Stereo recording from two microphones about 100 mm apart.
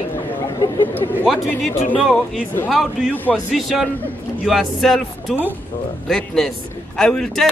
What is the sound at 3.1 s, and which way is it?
Speech, 15° left (ahead or behind).